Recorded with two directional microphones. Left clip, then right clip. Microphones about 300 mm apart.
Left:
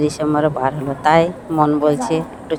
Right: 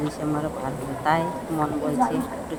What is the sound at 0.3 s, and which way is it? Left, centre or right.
Speech, left.